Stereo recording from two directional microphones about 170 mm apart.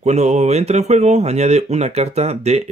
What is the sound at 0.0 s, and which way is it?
Speech, 40° right (ahead or behind).